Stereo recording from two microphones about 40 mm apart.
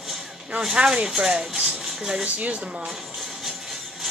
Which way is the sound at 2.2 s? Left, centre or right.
Right.